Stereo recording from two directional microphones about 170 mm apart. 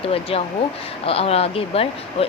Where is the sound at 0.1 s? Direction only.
35° left (ahead or behind).